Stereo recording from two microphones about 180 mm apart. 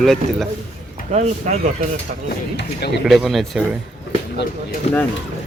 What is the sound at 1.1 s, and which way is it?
Speech, 40° right (ahead or behind).